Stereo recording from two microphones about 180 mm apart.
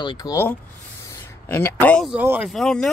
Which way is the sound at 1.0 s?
15° left (ahead or behind).